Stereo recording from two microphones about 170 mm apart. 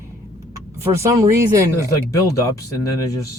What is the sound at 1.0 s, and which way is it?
Speech, 15° right (ahead or behind).